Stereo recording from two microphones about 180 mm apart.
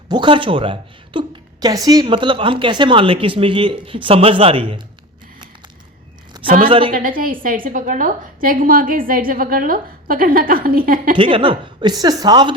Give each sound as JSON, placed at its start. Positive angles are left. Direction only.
{"t": 0.1, "sound": "a woman's voice", "side_deg": -25}
{"t": 6.6, "sound": "a woman's voice", "side_deg": -30}
{"t": 6.9, "sound": "a woman's voice", "side_deg": -50}
{"t": 11.2, "sound": "a woman's voice", "side_deg": -30}